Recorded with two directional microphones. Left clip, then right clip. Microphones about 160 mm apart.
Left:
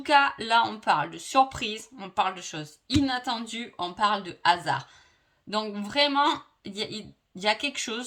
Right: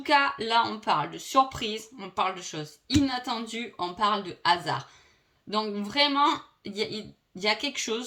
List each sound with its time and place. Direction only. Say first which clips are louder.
0.0 s speech: left 2 dB; 40° left (ahead or behind)